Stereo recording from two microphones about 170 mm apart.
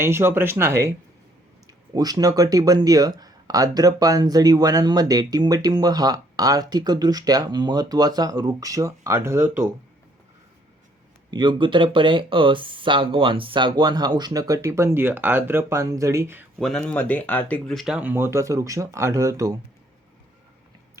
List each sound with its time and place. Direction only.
0.0 s speech: 15° right (ahead or behind)
11.3 s speech: 25° right (ahead or behind)
16.6 s speech: 5° left (ahead or behind); by 19.5 s 20° right (ahead or behind)